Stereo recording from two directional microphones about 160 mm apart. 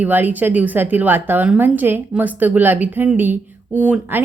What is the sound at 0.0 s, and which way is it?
A woman's voice, 10° right (ahead or behind).